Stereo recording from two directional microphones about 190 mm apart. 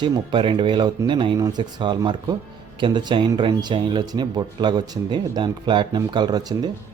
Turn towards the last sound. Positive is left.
turn(degrees=-20)  # may be behind; listen again after turning